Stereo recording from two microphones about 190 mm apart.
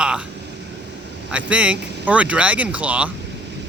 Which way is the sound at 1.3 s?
5° right (ahead or behind).